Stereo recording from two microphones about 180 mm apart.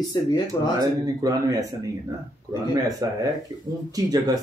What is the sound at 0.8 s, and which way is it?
Speech, 20° right (ahead or behind).